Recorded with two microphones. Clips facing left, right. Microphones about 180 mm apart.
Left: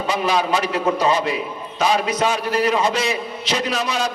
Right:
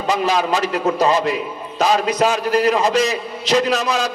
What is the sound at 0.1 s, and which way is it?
A man's voice, 40° right (ahead or behind).